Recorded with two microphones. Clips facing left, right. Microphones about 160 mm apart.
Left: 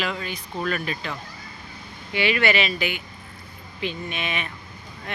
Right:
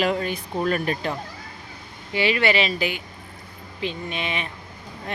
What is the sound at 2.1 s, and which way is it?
Speech, 35° right (ahead or behind).